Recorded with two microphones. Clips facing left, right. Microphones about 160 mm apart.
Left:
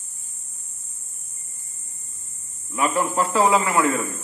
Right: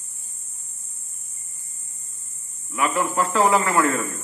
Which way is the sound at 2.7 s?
15° left (ahead or behind).